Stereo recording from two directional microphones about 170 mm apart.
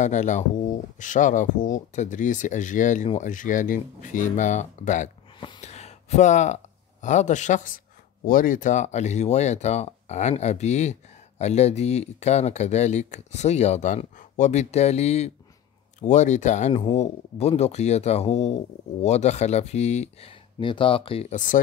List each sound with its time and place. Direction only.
0.0 s speech: 45° left (ahead or behind)
20.5 s speech: 30° left (ahead or behind)